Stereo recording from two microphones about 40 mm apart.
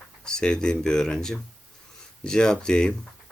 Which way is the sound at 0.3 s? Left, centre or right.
Centre.